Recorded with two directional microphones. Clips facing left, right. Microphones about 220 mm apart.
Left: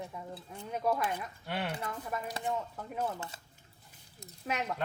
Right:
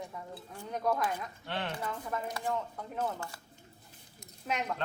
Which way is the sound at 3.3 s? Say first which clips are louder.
Even; 20° left (ahead or behind).